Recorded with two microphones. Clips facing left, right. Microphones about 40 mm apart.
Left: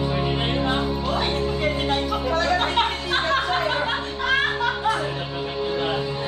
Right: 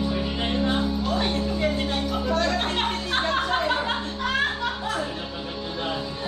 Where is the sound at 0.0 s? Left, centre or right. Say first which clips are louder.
Left 3 dB; left.